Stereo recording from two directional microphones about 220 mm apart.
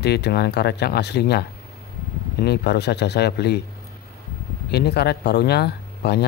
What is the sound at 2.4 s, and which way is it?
Speech, 50° left (ahead or behind).